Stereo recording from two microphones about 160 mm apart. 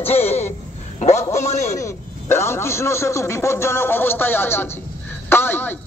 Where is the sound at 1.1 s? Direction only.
20° left (ahead or behind).